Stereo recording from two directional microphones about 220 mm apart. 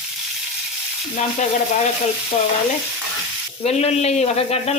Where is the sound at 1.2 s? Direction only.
30° left (ahead or behind).